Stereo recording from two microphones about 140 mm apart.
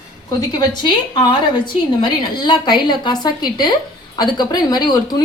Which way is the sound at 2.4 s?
35° left (ahead or behind).